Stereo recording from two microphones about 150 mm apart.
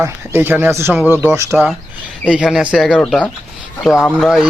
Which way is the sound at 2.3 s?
5° right (ahead or behind).